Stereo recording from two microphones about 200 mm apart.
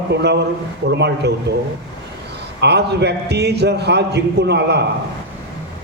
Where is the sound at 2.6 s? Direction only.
55° right (ahead or behind).